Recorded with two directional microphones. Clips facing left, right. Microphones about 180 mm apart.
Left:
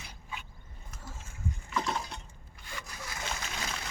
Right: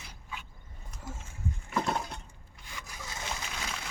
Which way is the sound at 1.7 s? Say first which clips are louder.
Right 2 dB; 50° right (ahead or behind).